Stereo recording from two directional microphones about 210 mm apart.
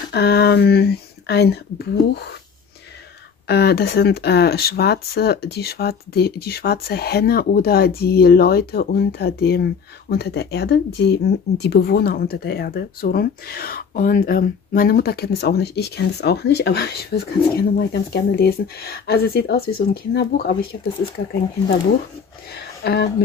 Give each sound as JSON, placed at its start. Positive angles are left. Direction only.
{"t": 0.1, "sound": "speech", "side_deg": 50}
{"t": 3.4, "sound": "speech", "side_deg": 50}